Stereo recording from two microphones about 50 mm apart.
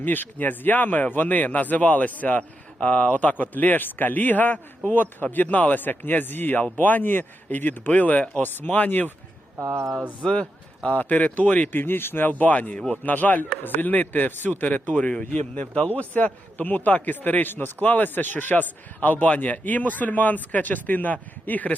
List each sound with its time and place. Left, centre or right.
0.0 s a man's voice: left
9.6 s speech: right
10.8 s a man's voice: left
11.7 s speech: left
12.3 s a man's voice: left